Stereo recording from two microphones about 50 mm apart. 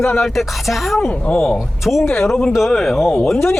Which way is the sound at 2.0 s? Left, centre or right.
Left.